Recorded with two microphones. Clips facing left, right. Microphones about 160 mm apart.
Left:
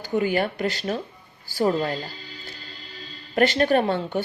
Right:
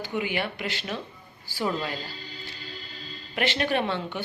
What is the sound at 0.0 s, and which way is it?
Speech, 40° left (ahead or behind).